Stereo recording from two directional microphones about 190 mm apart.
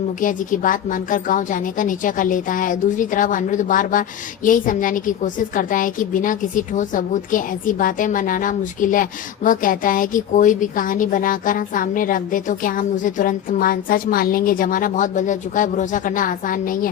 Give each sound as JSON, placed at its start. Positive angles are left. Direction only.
{"t": 0.2, "sound": "a woman's voice", "side_deg": 45}